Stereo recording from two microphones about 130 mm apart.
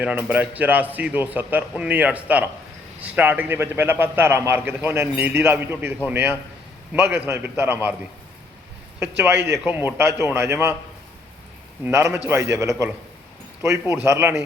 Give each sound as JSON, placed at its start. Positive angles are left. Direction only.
{"t": 0.0, "sound": "a man's voice", "side_deg": -10}
{"t": 9.0, "sound": "a man's voice", "side_deg": -20}
{"t": 11.9, "sound": "a man's voice", "side_deg": -20}